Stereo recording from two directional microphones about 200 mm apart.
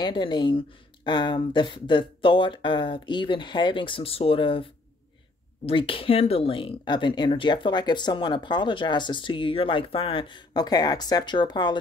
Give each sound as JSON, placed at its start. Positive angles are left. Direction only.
{"t": 0.0, "sound": "speech", "side_deg": 25}
{"t": 5.7, "sound": "speech", "side_deg": 25}